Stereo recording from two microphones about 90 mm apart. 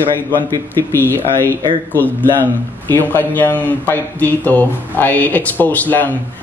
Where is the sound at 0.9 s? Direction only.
25° left (ahead or behind).